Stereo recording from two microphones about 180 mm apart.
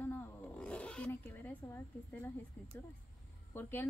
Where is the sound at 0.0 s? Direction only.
10° left (ahead or behind).